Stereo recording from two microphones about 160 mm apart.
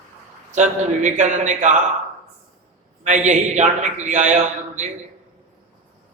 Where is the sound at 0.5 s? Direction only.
50° right (ahead or behind).